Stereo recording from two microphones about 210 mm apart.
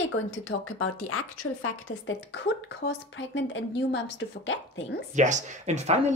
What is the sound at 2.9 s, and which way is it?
Speech, 60° left (ahead or behind).